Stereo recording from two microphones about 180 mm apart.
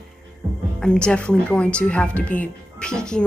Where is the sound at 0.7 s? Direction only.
5° left (ahead or behind).